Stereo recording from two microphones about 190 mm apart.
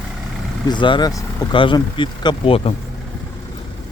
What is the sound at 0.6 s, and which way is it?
Speech, 25° left (ahead or behind).